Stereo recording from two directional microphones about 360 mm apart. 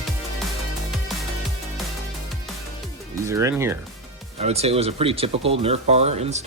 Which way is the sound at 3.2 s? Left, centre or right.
Centre.